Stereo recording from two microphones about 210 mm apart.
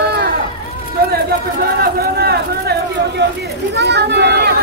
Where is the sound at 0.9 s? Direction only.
45° right (ahead or behind).